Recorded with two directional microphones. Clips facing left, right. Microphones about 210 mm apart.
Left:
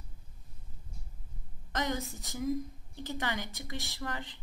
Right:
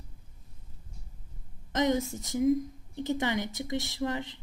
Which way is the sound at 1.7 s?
20° right (ahead or behind).